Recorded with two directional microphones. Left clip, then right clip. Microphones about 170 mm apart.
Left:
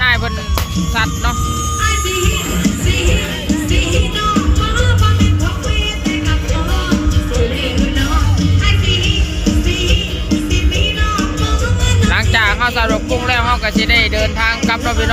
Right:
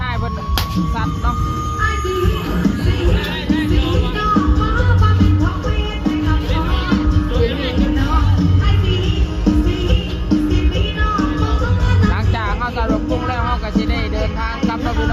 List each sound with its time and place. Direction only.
8.4 s music: 35° right (ahead or behind)
12.1 s music: centre (ahead or behind)